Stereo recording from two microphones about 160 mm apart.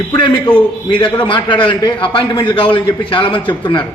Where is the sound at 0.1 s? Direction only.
30° left (ahead or behind).